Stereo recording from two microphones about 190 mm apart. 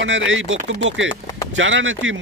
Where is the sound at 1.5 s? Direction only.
85° right.